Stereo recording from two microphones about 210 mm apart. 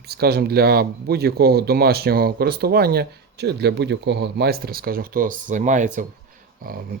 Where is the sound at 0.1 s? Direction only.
50° right (ahead or behind).